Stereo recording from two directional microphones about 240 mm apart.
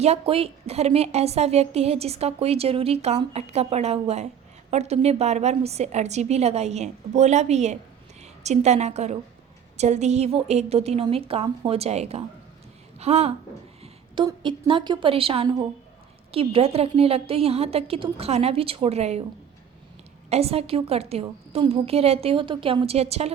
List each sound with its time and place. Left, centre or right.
0.0 s a woman's voice: right
20.3 s a woman's voice: right